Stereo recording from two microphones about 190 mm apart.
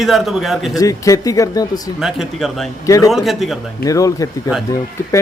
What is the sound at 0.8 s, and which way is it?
Speech, 15° left (ahead or behind).